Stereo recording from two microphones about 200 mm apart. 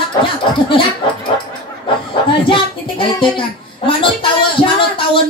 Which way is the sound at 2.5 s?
25° left (ahead or behind).